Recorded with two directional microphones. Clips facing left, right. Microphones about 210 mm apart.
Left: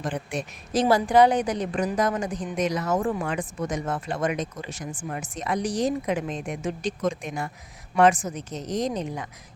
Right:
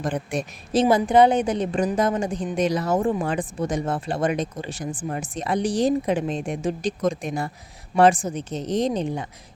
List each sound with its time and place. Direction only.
0.0 s a woman's voice: 40° right (ahead or behind)
0.7 s a woman's voice: 25° right (ahead or behind)